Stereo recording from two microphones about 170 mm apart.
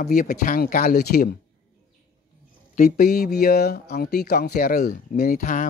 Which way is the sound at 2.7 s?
60° left (ahead or behind).